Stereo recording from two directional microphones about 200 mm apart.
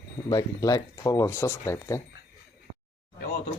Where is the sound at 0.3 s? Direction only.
20° left (ahead or behind).